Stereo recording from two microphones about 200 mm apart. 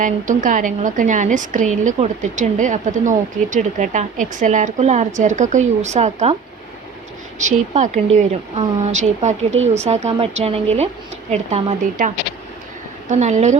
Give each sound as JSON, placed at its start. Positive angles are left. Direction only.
{"t": 0.0, "sound": "a woman's voice", "side_deg": -40}
{"t": 7.4, "sound": "a woman's voice", "side_deg": -35}